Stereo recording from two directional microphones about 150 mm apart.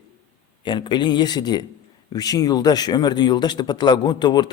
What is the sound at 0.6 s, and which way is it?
Speech, 30° left (ahead or behind).